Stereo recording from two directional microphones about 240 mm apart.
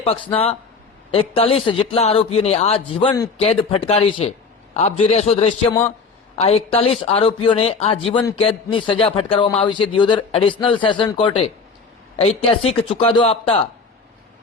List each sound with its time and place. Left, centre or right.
1.1 s speech: left